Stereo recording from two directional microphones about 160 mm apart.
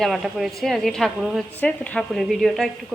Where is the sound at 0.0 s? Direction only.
Centre (ahead or behind).